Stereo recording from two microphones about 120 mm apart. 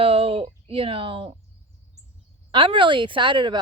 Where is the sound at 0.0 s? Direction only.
50° right (ahead or behind).